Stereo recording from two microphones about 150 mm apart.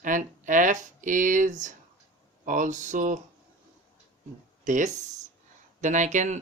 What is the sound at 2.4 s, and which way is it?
Speech, 60° right (ahead or behind).